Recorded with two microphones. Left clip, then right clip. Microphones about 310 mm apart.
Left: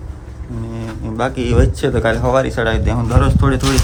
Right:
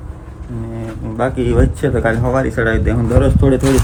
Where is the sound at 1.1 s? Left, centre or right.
Centre.